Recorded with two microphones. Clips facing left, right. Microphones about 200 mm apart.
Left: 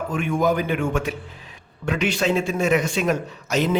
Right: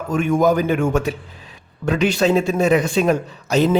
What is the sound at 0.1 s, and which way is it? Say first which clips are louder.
A man's voice: right 6 dB; 45° right (ahead or behind).